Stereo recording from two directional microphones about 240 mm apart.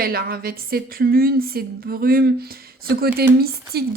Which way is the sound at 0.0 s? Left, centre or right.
Right.